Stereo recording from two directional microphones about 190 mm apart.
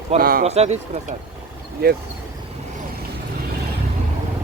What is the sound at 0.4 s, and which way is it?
Speech, 35° right (ahead or behind).